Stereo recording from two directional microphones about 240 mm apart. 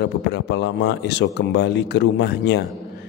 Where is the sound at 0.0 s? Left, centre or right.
Left.